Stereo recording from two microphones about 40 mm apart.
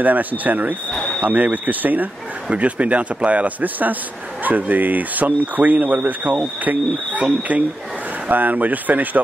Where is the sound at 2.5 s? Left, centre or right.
Right.